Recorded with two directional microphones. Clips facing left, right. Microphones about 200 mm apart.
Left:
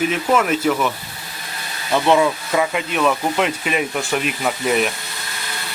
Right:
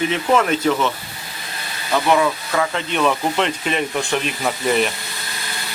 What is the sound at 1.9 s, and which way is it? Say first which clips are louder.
Speech: left 2 dB; 20° left (ahead or behind).